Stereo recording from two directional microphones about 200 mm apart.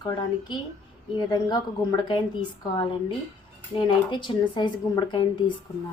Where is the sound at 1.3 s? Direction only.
20° left (ahead or behind).